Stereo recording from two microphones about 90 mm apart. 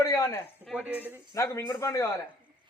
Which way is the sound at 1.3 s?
35° left (ahead or behind).